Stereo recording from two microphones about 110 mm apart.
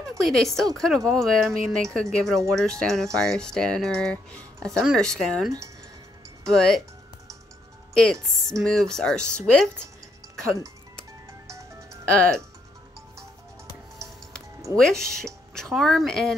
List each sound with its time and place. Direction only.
0.2 s speech: centre (ahead or behind)
7.9 s speech: 5° left (ahead or behind)
11.4 s music: 30° right (ahead or behind)
14.8 s speech: 5° left (ahead or behind)